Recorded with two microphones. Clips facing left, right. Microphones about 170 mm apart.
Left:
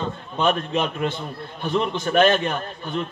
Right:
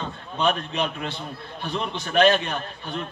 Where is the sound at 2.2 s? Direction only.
50° left (ahead or behind).